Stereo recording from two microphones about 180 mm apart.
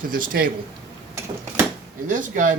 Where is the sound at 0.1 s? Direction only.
50° right (ahead or behind).